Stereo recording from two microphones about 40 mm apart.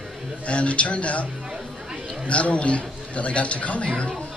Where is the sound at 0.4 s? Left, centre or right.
Left.